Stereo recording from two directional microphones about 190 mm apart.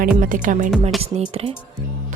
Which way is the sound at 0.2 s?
45° right (ahead or behind).